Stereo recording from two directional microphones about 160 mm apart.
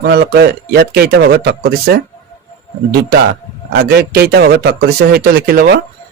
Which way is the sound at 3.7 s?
80° right.